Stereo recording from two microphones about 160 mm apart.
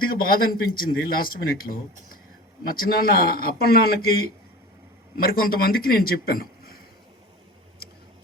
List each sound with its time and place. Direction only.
0.0 s a man's voice: 65° left (ahead or behind)